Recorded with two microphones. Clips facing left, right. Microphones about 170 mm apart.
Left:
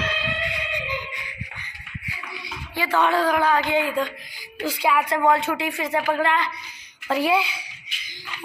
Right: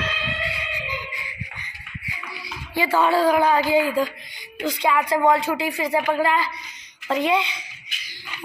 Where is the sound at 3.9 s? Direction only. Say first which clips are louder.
Right 2 dB; 5° right (ahead or behind).